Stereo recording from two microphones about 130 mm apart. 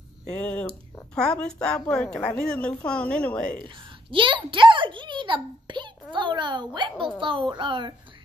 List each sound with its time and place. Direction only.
0.3 s a woman's voice: 10° left (ahead or behind)
3.5 s a child's voice: 40° right (ahead or behind)